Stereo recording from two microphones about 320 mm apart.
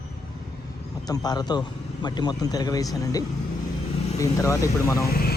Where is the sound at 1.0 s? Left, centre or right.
Centre.